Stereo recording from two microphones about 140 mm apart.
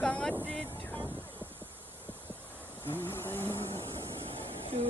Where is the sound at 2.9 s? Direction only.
15° left (ahead or behind).